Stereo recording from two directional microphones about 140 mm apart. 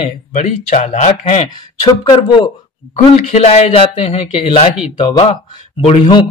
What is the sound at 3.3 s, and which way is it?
Speech, 50° left (ahead or behind).